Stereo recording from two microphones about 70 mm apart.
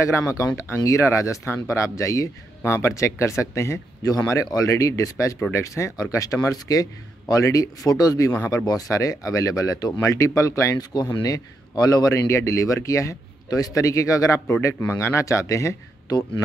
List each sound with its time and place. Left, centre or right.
0.0 s a man's voice: left
4.0 s a man's voice: left
10.0 s a man's voice: left
10.8 s a man's voice: left